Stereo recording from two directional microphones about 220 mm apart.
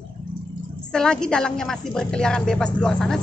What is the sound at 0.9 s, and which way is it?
A woman's voice, 5° left (ahead or behind).